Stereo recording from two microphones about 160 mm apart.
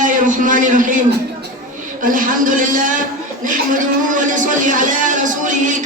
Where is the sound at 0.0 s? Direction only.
55° right (ahead or behind).